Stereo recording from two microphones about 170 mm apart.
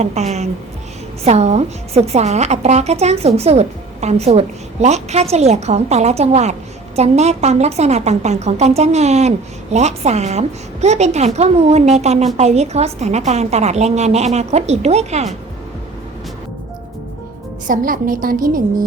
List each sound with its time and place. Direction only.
0.0 s a woman's voice: 40° right (ahead or behind)
17.7 s a woman's voice: 55° right (ahead or behind)